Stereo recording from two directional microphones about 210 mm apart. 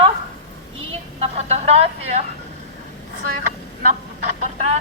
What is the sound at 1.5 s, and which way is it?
Speech, 30° right (ahead or behind).